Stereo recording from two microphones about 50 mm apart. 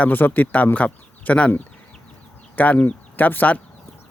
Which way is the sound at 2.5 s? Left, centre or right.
Left.